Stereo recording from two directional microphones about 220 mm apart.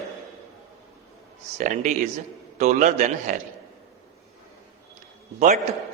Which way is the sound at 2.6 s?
35° right (ahead or behind).